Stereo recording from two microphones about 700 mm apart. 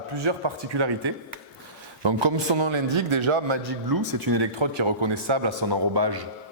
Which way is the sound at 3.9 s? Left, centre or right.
Right.